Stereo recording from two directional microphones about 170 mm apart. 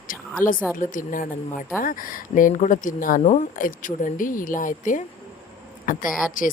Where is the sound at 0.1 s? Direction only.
55° left (ahead or behind).